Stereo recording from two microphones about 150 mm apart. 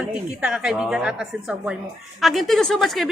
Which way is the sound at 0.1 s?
5° right (ahead or behind).